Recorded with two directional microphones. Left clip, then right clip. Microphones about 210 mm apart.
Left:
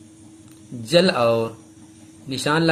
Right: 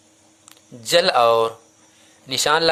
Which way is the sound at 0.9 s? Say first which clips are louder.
Right 2 dB; 35° right (ahead or behind).